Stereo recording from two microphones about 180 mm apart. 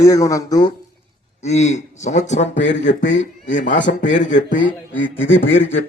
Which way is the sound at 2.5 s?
80° left.